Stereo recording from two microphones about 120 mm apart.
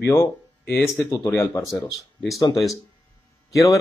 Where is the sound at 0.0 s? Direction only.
20° left (ahead or behind).